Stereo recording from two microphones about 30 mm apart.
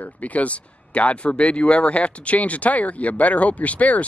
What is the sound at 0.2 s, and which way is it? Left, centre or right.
Speech, left.